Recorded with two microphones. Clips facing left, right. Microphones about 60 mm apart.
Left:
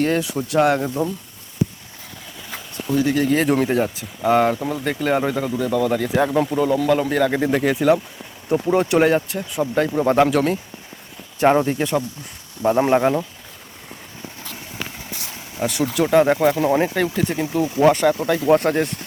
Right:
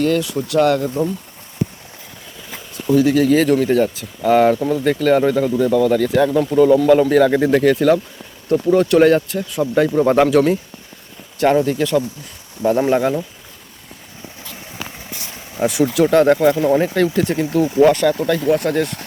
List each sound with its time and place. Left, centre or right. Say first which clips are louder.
0.0 s speech: right 3 dB; left
2.7 s speech: right 5 dB; centre
6.5 s speech: right 7 dB; centre
11.3 s speech: right 1 dB; left
15.5 s speech: right 5 dB; centre
16.0 s speech: right 2 dB; centre
17.7 s speech: right 2 dB; left